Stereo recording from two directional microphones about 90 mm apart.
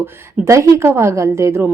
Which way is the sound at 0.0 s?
35° right (ahead or behind).